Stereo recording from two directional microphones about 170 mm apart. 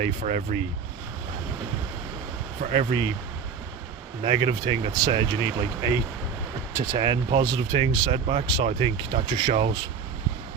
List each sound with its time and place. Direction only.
0.0 s speech: 45° right (ahead or behind)
2.7 s speech: 30° right (ahead or behind)
4.2 s speech: 30° right (ahead or behind)
9.5 s speech: 35° right (ahead or behind)